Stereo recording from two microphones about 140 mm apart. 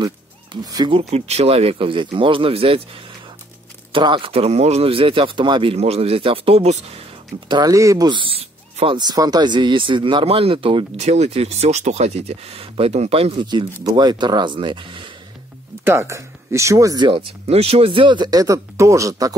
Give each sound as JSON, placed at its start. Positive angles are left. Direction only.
{"t": 0.0, "sound": "speech", "side_deg": -30}
{"t": 3.9, "sound": "speech", "side_deg": -35}
{"t": 7.4, "sound": "speech", "side_deg": -30}
{"t": 8.9, "sound": "speech", "side_deg": -30}
{"t": 11.0, "sound": "speech", "side_deg": -50}
{"t": 15.8, "sound": "speech", "side_deg": -20}
{"t": 17.5, "sound": "speech", "side_deg": -45}